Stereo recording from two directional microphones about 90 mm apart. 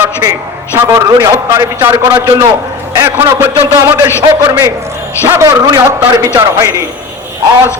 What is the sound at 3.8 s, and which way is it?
Speech, 35° right (ahead or behind).